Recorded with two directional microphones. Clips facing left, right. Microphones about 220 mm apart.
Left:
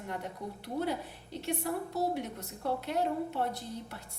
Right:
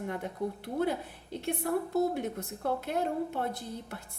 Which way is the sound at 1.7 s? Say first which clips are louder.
Right 6 dB; 55° right (ahead or behind).